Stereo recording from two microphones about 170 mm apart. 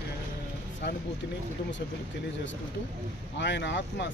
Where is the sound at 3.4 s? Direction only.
90° left.